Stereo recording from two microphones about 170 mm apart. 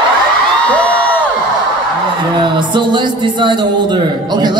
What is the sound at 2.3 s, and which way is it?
A man's voice, 30° right (ahead or behind).